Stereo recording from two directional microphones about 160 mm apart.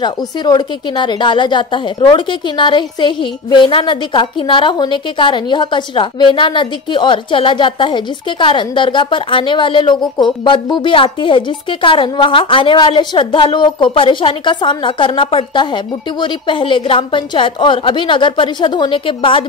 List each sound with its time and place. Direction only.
0.0 s a woman's voice: 30° left (ahead or behind)